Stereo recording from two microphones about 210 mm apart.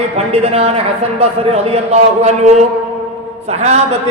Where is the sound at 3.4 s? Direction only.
30° right (ahead or behind).